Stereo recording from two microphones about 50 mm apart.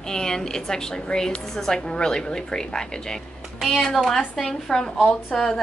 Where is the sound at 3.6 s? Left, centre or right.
Centre.